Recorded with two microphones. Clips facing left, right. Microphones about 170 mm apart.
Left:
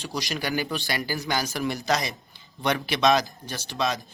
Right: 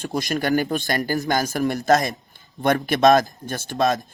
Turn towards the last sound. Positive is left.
turn(degrees=-50)  # may be behind; listen again after turning